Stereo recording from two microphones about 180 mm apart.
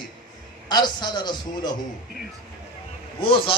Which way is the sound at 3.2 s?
30° left (ahead or behind).